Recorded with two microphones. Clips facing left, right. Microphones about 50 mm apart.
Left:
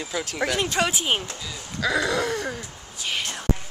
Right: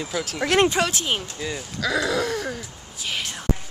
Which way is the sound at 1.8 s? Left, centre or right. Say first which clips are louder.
Even; centre.